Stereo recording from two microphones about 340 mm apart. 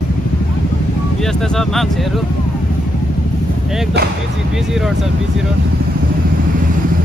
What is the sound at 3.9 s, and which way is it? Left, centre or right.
Speech, right.